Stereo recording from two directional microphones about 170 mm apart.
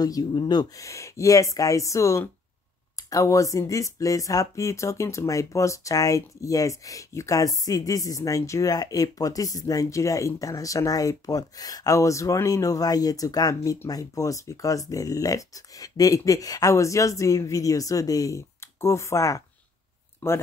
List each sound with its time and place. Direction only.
0.0 s speech: 20° left (ahead or behind)